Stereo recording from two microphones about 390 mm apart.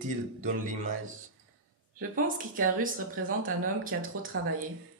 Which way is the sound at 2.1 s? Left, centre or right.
Right.